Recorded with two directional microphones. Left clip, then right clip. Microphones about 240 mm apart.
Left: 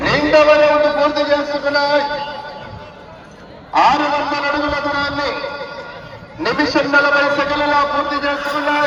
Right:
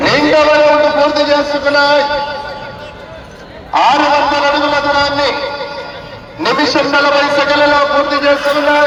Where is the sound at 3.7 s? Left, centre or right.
Right.